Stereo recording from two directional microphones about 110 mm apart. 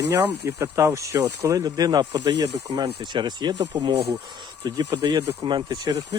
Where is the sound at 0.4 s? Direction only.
30° right (ahead or behind).